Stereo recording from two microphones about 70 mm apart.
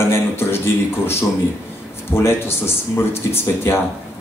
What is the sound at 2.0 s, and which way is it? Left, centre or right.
Speech, left.